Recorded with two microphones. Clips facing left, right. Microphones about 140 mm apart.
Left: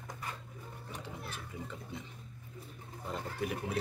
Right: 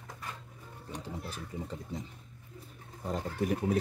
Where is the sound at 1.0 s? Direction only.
35° right (ahead or behind).